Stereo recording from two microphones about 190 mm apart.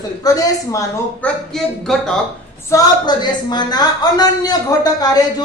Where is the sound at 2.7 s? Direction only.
20° left (ahead or behind).